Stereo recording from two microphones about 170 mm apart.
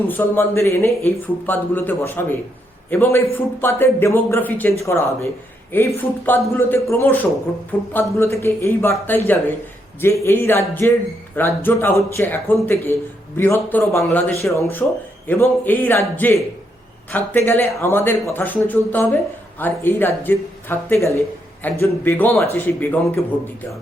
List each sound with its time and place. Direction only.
0.1 s speech: 15° left (ahead or behind)